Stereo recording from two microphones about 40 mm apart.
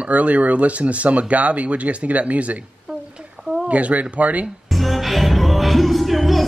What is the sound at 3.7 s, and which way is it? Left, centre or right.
Speech, right.